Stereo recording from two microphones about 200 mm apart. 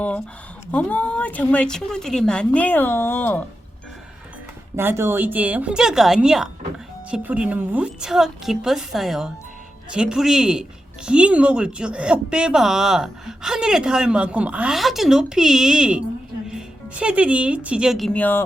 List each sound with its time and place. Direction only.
0.7 s speech: 5° left (ahead or behind)
4.8 s a woman's voice: 10° right (ahead or behind); by 18.4 s 10° left (ahead or behind)